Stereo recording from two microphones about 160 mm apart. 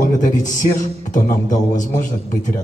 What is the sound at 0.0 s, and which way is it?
A man's voice, 55° left (ahead or behind).